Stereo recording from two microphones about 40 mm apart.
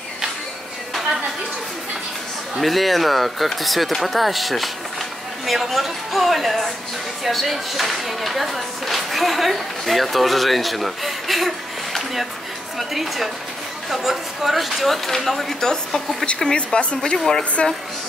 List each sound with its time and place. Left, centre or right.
2.6 s speech: centre
16.5 s speech: left